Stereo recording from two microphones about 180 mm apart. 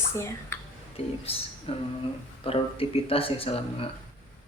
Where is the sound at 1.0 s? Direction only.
35° left (ahead or behind).